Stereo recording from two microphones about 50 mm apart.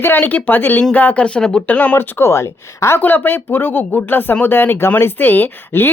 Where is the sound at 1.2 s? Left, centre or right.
Centre.